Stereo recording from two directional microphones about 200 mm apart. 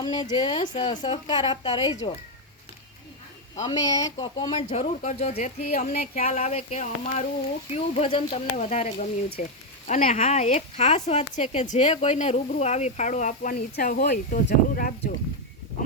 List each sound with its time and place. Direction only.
0.0 s a woman's voice: 20° left (ahead or behind)
3.5 s a woman's voice: 20° left (ahead or behind)
4.5 s speech: 35° left (ahead or behind)